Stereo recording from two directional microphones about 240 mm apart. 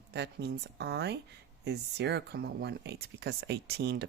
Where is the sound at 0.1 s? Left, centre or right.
Right.